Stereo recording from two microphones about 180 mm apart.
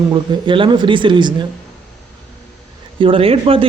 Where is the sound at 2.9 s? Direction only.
30° right (ahead or behind).